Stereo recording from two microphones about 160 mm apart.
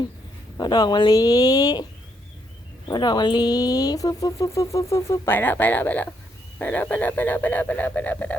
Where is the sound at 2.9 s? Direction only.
25° left (ahead or behind).